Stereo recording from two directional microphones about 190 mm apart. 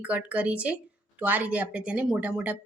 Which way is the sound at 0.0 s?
5° right (ahead or behind).